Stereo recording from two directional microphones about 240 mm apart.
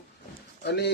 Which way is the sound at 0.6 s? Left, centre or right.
Left.